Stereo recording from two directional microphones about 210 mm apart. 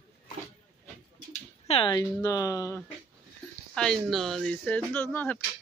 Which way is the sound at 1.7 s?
20° left (ahead or behind).